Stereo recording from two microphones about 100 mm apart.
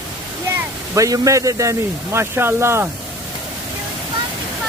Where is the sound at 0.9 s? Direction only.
35° right (ahead or behind).